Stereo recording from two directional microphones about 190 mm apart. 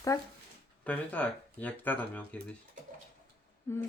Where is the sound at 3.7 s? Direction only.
15° left (ahead or behind).